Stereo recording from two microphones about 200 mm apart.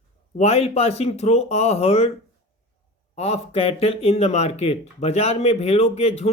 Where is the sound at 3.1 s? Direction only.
30° left (ahead or behind).